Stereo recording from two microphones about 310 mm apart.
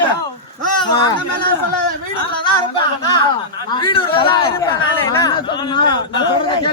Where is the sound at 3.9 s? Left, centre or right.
Centre.